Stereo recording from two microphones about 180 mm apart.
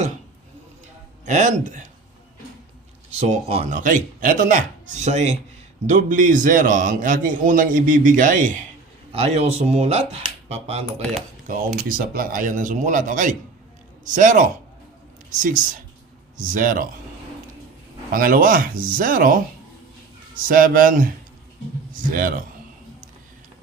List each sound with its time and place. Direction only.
1.2 s a man's voice: 45° right (ahead or behind)
3.1 s a man's voice: 40° right (ahead or behind)
9.1 s speech: 35° right (ahead or behind)
11.4 s a man's voice: 50° right (ahead or behind)
18.1 s a man's voice: 50° right (ahead or behind)